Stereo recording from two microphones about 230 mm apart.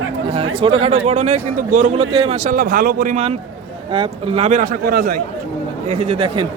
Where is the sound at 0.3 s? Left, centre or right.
Right.